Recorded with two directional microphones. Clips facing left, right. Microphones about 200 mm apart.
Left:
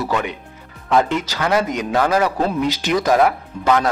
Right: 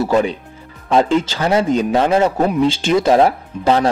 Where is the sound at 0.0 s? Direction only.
30° right (ahead or behind).